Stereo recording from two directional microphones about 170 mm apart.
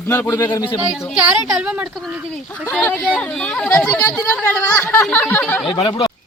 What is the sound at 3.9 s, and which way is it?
Speech, 20° left (ahead or behind).